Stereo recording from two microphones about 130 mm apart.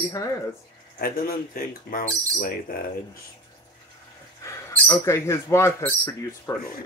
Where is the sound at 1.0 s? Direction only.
90° left.